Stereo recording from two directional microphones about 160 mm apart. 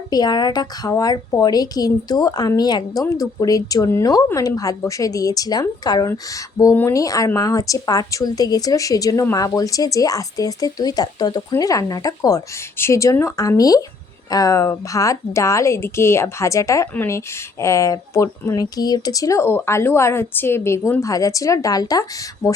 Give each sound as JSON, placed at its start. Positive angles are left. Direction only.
{"t": 0.1, "sound": "a woman's voice", "side_deg": 25}